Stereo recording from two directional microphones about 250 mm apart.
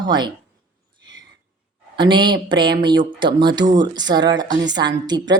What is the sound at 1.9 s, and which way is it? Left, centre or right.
Speech, centre.